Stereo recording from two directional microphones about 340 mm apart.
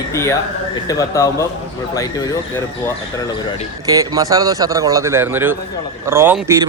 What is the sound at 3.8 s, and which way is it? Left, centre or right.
Speech, centre.